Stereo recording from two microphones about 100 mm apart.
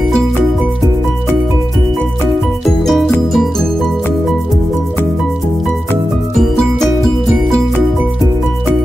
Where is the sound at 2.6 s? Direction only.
Centre (ahead or behind).